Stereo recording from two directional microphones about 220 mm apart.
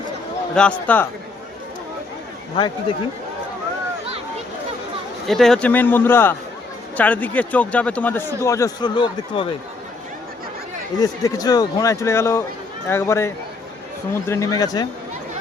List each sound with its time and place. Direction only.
0.5 s a man's voice: 5° left (ahead or behind)
2.6 s speech: 20° left (ahead or behind)
5.3 s speech: centre (ahead or behind); by 9.6 s 25° left (ahead or behind)
10.9 s speech: 15° left (ahead or behind)